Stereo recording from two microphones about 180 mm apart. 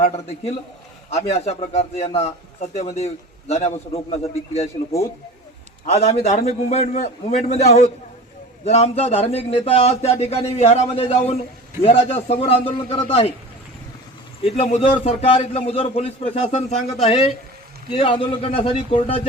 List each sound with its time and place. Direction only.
0.0 s a man's voice: 35° left (ahead or behind)
5.8 s a man's voice: 40° left (ahead or behind)
14.4 s a man's voice: 35° left (ahead or behind)